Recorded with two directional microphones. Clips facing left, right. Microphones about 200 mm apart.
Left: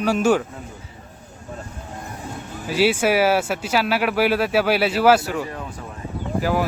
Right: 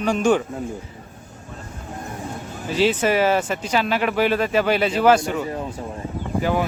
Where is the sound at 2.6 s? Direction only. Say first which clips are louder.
Left 1 dB; 10° left (ahead or behind).